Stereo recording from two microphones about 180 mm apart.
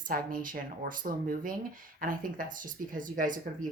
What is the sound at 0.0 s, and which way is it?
Speech, 50° right (ahead or behind).